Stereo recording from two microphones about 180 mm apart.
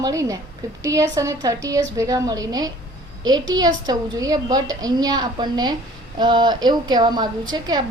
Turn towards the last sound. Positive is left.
turn(degrees=-20)  # may be behind; listen again after turning